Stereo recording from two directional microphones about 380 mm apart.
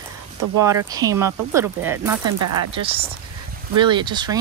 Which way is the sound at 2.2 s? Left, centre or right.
Right.